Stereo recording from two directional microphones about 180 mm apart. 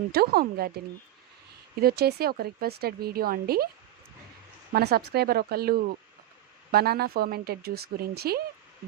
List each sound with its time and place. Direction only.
0.1 s speech: 60° right (ahead or behind)
1.8 s speech: 60° right (ahead or behind)
4.7 s speech: 60° right (ahead or behind)